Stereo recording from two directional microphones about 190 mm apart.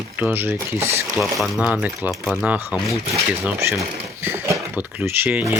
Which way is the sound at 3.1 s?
15° right (ahead or behind).